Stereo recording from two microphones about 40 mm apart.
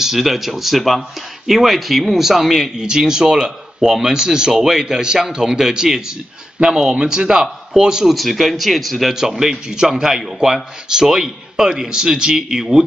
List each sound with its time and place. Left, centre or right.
0.0 s speech: centre
8.1 s speech: centre